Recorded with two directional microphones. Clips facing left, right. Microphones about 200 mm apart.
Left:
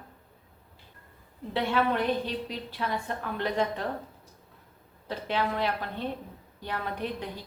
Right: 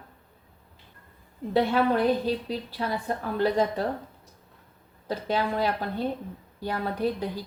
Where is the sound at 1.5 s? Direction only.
40° right (ahead or behind).